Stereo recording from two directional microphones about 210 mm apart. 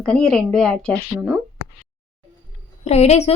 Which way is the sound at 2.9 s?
30° left (ahead or behind).